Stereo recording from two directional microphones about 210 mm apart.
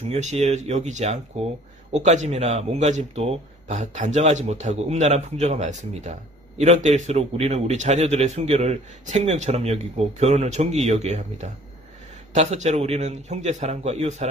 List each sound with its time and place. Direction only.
0.1 s a man's voice: 30° right (ahead or behind)
12.4 s a man's voice: 35° right (ahead or behind)